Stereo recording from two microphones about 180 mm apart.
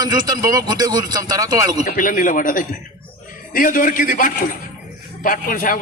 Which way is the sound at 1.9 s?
50° left (ahead or behind).